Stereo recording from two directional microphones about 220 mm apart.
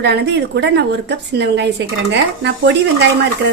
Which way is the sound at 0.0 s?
50° right (ahead or behind).